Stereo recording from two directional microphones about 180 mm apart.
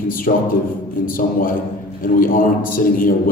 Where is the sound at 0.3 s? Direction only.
55° left (ahead or behind).